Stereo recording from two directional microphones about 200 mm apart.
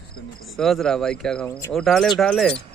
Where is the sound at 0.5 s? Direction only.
Centre (ahead or behind).